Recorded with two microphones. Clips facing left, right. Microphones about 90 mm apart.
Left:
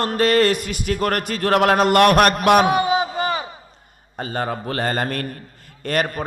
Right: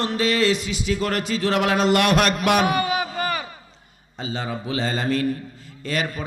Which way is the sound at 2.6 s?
25° left (ahead or behind).